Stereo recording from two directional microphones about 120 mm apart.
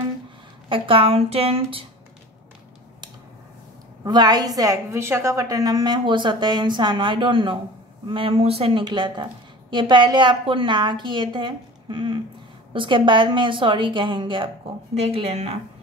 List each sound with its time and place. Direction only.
0.7 s a woman's voice: 45° right (ahead or behind)
4.0 s a woman's voice: 35° right (ahead or behind)
15.0 s a woman's voice: 55° right (ahead or behind)